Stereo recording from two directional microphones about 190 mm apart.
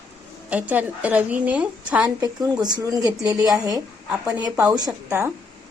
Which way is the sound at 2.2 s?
20° right (ahead or behind).